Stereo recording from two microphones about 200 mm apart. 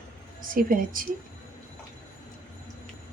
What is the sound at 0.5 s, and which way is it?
Speech, 45° right (ahead or behind).